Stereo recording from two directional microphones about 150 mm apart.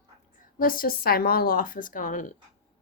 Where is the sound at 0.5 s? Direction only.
70° left (ahead or behind).